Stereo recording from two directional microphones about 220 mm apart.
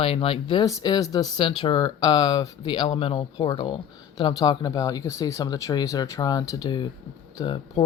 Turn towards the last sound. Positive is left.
turn(degrees=20)  # may be behind; listen again after turning